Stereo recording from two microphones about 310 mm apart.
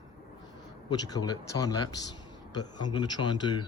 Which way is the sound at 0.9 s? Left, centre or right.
Centre.